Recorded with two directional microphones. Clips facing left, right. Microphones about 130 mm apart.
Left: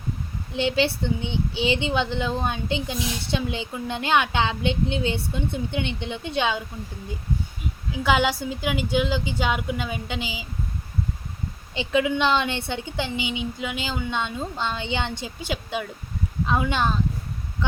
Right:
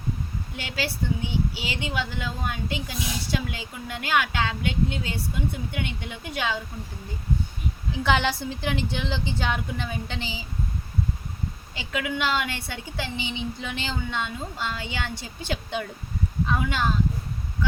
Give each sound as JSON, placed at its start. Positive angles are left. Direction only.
{"t": 0.5, "sound": "a woman's voice", "side_deg": 25}
{"t": 7.9, "sound": "a woman's voice", "side_deg": 5}
{"t": 11.7, "sound": "a woman's voice", "side_deg": 20}
{"t": 14.1, "sound": "a woman's voice", "side_deg": 20}
{"t": 15.4, "sound": "a woman's voice", "side_deg": 5}
{"t": 16.5, "sound": "a woman's voice", "side_deg": 20}